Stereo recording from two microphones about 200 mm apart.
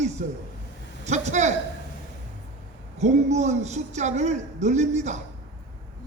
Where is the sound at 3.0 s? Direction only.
35° right (ahead or behind).